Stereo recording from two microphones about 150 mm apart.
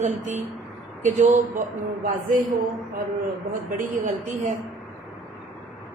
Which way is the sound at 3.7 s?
65° right (ahead or behind).